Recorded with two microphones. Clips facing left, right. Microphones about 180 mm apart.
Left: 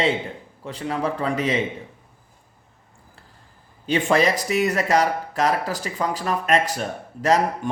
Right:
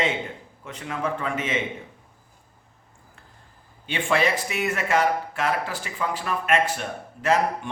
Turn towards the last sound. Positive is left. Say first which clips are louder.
# left 3 dB
turn(degrees=40)  # may be behind; listen again after turning